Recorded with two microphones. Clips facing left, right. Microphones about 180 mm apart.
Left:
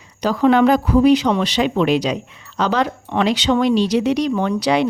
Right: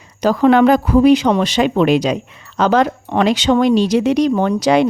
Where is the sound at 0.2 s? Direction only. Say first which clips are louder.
Right 3 dB; 50° right (ahead or behind).